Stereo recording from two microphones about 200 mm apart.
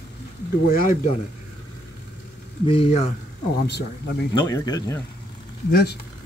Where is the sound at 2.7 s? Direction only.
30° left (ahead or behind).